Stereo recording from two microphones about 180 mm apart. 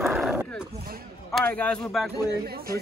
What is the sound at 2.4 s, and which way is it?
Speech, 55° right (ahead or behind).